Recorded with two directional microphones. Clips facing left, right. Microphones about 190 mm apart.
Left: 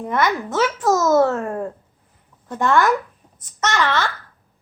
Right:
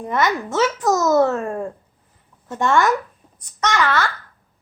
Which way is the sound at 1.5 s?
Centre (ahead or behind).